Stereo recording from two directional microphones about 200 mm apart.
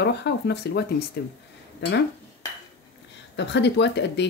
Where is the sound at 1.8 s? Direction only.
55° left (ahead or behind).